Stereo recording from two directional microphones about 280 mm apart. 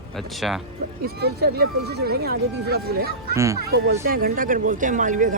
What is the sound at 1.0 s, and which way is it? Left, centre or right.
Speech, right.